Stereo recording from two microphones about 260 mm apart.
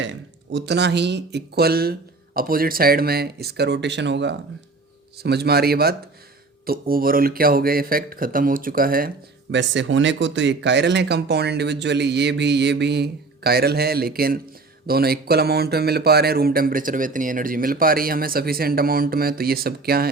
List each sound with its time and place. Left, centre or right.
0.0 s speech: right